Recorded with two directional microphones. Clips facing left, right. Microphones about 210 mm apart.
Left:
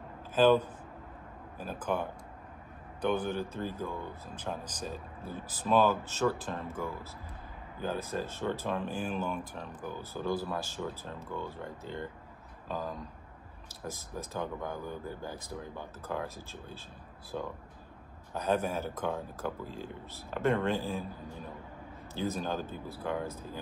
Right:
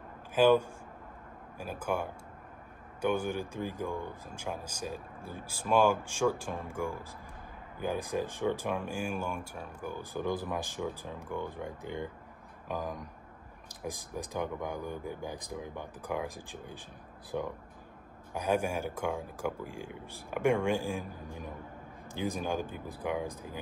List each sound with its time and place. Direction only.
0.3 s speech: 10° right (ahead or behind)